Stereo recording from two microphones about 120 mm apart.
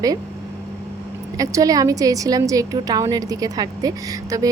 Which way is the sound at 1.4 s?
30° right (ahead or behind).